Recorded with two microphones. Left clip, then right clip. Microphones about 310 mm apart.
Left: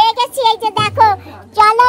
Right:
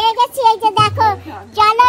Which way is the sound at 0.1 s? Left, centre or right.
Centre.